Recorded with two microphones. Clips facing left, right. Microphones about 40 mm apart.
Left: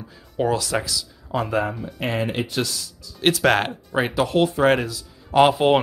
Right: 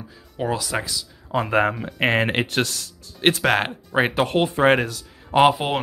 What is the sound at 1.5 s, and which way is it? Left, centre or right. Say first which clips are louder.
Speech: right 3 dB; right.